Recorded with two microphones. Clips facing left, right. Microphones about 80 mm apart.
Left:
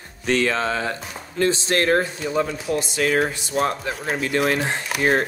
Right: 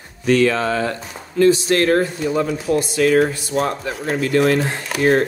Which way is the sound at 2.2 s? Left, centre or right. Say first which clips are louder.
Right 3 dB; centre.